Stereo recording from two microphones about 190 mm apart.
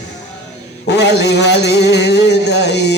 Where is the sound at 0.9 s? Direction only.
60° left (ahead or behind).